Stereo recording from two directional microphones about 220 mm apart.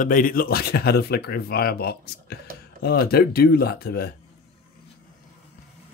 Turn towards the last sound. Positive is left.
turn(degrees=45)  # may be behind; listen again after turning